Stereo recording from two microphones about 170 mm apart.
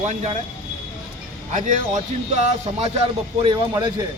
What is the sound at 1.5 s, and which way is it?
Speech, 45° right (ahead or behind).